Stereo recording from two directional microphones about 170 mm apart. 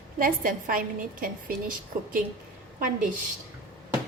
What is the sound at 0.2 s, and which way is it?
A woman's voice, 55° right (ahead or behind).